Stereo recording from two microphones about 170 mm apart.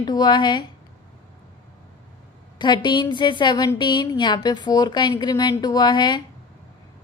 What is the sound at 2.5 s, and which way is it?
A woman's voice, 25° left (ahead or behind).